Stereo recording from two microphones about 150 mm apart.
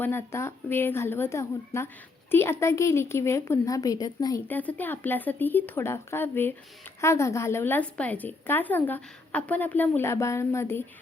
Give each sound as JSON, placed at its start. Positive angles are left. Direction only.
{"t": 0.0, "sound": "a woman's voice", "side_deg": 15}
{"t": 4.4, "sound": "speech", "side_deg": 10}